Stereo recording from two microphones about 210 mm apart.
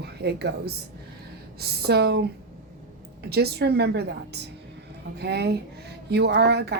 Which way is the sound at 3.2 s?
50° right (ahead or behind).